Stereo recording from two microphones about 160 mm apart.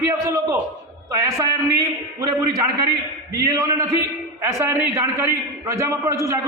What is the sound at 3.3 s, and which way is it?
A man's voice, 20° right (ahead or behind).